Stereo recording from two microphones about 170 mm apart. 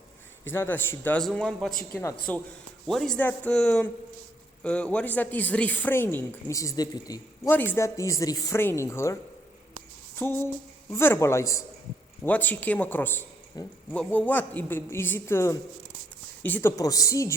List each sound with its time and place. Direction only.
0.5 s a man's voice: 15° left (ahead or behind)
1.9 s a man's voice: 15° left (ahead or behind)
7.5 s speech: 10° left (ahead or behind)
10.2 s speech: 15° left (ahead or behind)